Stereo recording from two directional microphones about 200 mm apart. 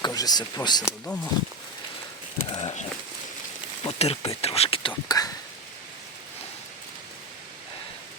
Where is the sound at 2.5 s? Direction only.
30° left (ahead or behind).